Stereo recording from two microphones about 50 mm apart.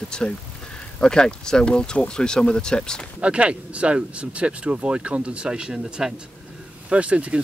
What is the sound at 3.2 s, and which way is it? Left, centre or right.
Speech, right.